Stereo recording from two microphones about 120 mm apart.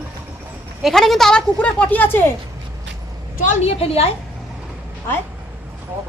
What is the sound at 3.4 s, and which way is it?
Speech, 75° left (ahead or behind).